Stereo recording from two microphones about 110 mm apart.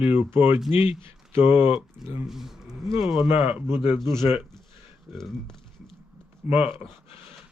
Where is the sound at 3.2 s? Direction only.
55° left (ahead or behind).